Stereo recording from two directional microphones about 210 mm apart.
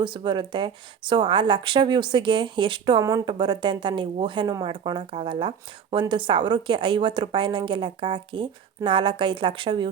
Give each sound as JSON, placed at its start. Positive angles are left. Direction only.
{"t": 0.0, "sound": "speech", "side_deg": -20}